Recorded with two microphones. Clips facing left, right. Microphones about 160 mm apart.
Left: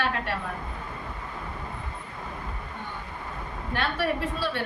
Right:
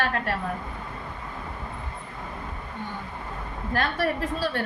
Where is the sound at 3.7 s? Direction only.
40° right (ahead or behind).